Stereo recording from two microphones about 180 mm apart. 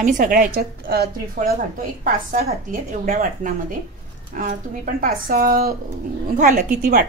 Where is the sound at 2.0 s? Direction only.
45° right (ahead or behind).